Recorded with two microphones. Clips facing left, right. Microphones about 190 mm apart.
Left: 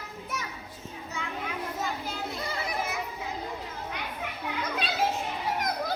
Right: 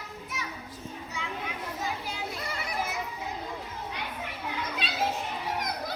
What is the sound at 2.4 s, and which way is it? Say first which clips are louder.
Children playing: left 3 dB; 25° left (ahead or behind).